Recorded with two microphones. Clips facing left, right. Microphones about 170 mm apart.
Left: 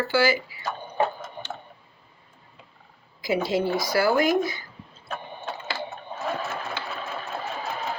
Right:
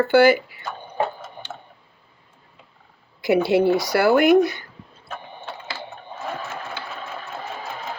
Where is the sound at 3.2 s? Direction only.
65° right (ahead or behind).